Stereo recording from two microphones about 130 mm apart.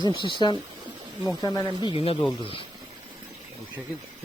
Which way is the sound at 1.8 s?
45° left (ahead or behind).